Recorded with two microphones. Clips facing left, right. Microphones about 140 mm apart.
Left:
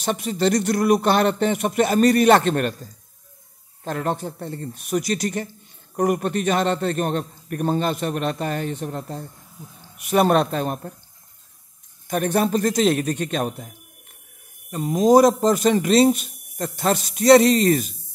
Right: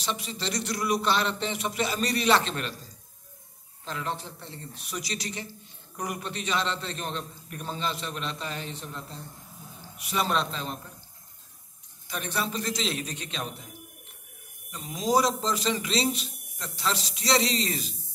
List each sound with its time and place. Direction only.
0.0 s a man's voice: 50° left (ahead or behind)
3.8 s a man's voice: 50° left (ahead or behind)
12.1 s a man's voice: 50° left (ahead or behind)
14.7 s a man's voice: 50° left (ahead or behind)